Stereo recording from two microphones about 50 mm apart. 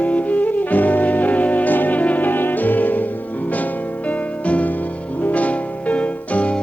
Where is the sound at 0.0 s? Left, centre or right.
Left.